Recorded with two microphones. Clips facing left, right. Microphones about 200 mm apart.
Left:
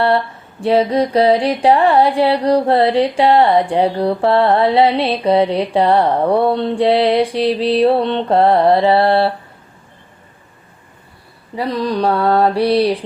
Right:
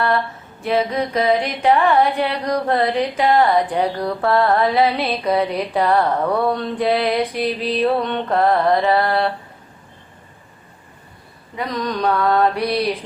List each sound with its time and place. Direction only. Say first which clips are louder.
0.6 s music: left 6 dB; 35° left (ahead or behind)
11.5 s music: left 5 dB; 30° left (ahead or behind)